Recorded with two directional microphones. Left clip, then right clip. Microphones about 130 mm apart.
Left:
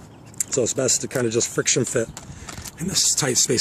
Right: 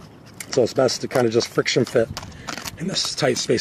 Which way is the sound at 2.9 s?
20° left (ahead or behind).